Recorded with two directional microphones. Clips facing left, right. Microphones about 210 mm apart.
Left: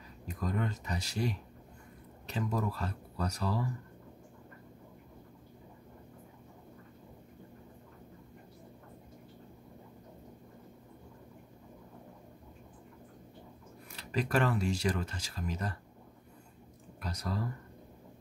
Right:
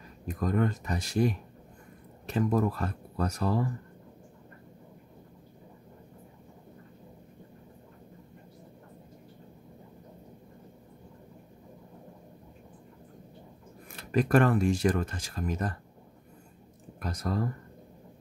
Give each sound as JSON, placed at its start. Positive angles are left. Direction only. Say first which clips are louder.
{"t": 0.3, "sound": "speech", "louder": "right 7 dB", "side_deg": -50}
{"t": 13.9, "sound": "speech", "louder": "right 7 dB", "side_deg": -50}
{"t": 17.0, "sound": "speech", "louder": "right 6 dB", "side_deg": -50}